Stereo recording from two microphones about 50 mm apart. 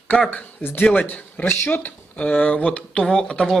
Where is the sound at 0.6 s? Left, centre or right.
Left.